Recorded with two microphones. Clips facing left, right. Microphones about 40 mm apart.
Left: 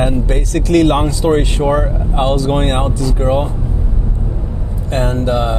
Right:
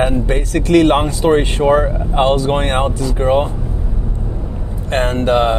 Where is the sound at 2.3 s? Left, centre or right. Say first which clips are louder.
Even; right.